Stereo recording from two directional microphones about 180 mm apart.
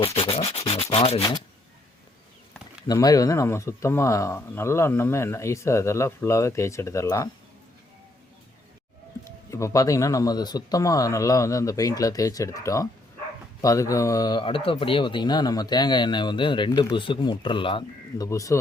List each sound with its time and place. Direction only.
0.0 s sanding: 30° left (ahead or behind)
2.8 s speech: 20° left (ahead or behind)
9.2 s speech: 15° left (ahead or behind)
18.3 s speech: 15° left (ahead or behind)